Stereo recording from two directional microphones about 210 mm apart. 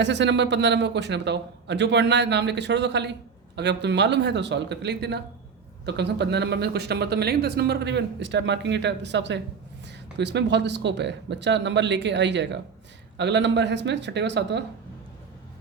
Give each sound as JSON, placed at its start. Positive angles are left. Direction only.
{"t": 0.0, "sound": "a man's voice", "side_deg": -55}